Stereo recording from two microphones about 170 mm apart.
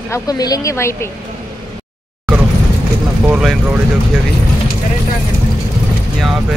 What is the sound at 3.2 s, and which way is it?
Speech, 5° right (ahead or behind).